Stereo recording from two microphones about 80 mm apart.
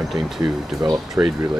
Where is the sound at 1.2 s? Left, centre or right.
Right.